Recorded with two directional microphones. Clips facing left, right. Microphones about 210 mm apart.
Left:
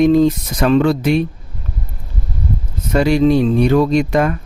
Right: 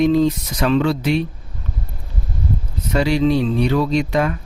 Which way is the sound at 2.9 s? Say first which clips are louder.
Left 4 dB; 50° left (ahead or behind).